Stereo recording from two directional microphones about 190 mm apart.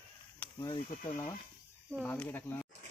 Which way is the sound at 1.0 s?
15° left (ahead or behind).